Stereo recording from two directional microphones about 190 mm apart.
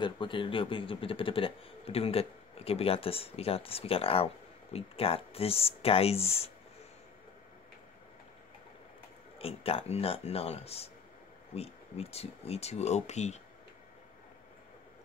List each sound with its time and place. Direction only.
0.0 s a man's voice: 25° left (ahead or behind)
9.4 s speech: 30° left (ahead or behind)